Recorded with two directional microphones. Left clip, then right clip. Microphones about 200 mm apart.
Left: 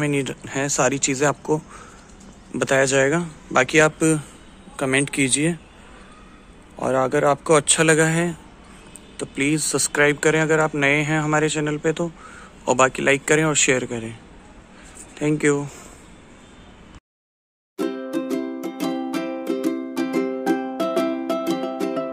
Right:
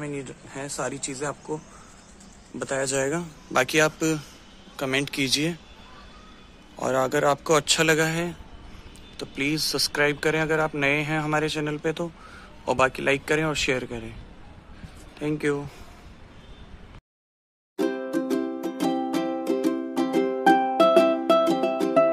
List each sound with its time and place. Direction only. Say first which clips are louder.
0.0 s speech: left 11 dB; 30° left (ahead or behind)
2.6 s speech: left 8 dB; 10° left (ahead or behind)
6.8 s speech: left 4 dB; centre (ahead or behind)
15.1 s speech: left 6 dB; 10° left (ahead or behind)
17.7 s music: even; 10° right (ahead or behind)
18.1 s music: left 1 dB; 25° right (ahead or behind)
18.4 s music: left 1 dB; 15° right (ahead or behind)
18.8 s music: right 1 dB; 30° right (ahead or behind)
19.6 s music: left 1 dB; 15° right (ahead or behind)
20.0 s music: right 1 dB; 35° right (ahead or behind)
20.4 s music: right 5 dB; 10° right (ahead or behind)